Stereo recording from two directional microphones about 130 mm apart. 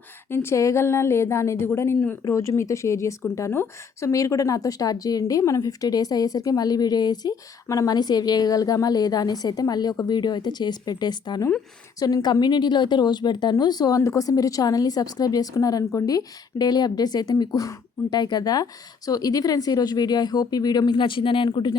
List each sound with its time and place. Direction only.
0.3 s a woman's voice: 20° left (ahead or behind); by 21.8 s 35° left (ahead or behind)